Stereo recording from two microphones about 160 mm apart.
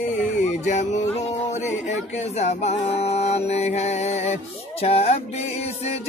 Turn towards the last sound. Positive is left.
turn(degrees=40)  # may be behind; listen again after turning